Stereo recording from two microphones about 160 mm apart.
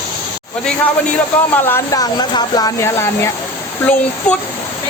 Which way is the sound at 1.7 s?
25° left (ahead or behind).